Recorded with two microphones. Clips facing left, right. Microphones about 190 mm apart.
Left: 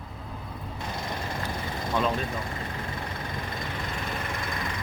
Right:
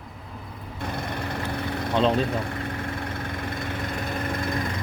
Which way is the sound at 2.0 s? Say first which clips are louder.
Right 6 dB; 35° right (ahead or behind).